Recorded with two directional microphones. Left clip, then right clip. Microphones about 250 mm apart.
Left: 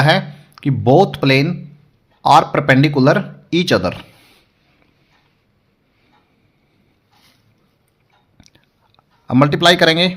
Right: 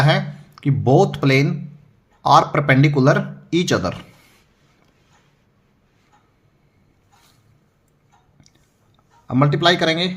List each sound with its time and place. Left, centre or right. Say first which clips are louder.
0.0 s speech: left 4 dB; left
8.4 s chewing: left 5 dB; left
9.2 s speech: left 4 dB; left